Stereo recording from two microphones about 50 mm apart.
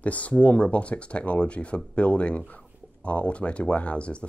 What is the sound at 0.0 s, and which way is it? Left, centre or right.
Speech, left.